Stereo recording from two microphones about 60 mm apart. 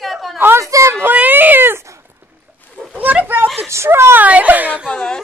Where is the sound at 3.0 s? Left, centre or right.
Right.